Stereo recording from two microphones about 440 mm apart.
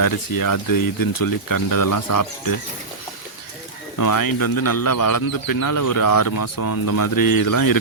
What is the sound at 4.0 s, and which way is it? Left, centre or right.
Speech, left.